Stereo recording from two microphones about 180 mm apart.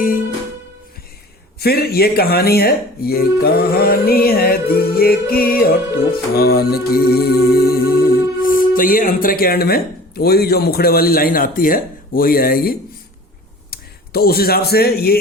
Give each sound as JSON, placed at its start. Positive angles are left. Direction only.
{"t": 1.5, "sound": "speech", "side_deg": 60}
{"t": 6.3, "sound": "music", "side_deg": 60}
{"t": 13.7, "sound": "speech", "side_deg": 60}